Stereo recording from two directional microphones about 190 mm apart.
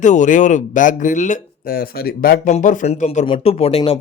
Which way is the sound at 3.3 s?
30° left (ahead or behind).